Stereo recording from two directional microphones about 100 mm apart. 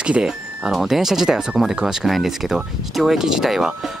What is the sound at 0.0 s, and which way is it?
Speech, 10° right (ahead or behind).